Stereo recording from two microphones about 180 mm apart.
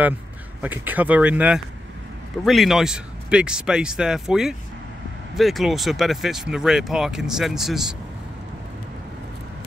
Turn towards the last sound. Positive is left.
turn(degrees=0)  # may be behind; listen again after turning